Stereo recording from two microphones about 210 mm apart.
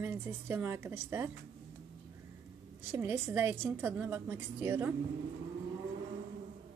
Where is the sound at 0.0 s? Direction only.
10° right (ahead or behind).